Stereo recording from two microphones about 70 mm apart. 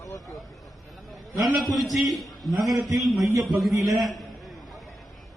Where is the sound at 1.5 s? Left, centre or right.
Centre.